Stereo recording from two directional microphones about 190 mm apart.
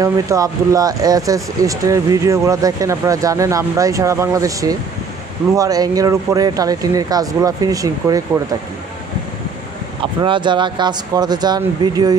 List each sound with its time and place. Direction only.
0.0 s speech: 20° right (ahead or behind)
10.2 s speech: 25° right (ahead or behind)